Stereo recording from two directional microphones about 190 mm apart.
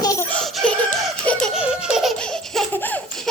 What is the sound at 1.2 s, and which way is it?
Laughter, centre (ahead or behind).